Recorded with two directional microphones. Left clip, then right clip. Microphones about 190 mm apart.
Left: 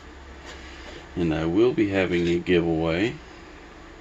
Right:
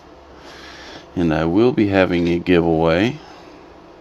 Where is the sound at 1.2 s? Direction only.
60° right (ahead or behind).